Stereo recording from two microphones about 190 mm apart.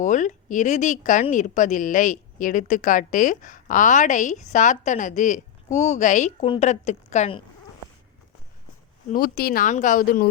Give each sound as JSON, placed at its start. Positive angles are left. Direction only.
{"t": 0.0, "sound": "speech", "side_deg": 40}
{"t": 9.1, "sound": "speech", "side_deg": 50}